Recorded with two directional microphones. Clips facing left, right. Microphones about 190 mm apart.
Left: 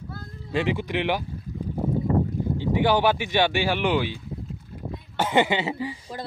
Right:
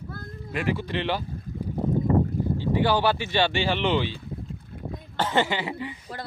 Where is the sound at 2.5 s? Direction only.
15° left (ahead or behind).